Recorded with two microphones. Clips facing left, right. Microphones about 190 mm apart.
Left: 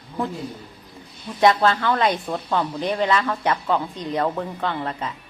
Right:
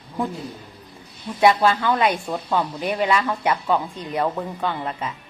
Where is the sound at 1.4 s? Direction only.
10° right (ahead or behind).